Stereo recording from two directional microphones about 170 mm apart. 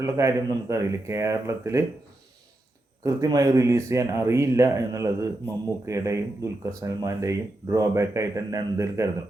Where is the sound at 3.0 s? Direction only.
20° right (ahead or behind).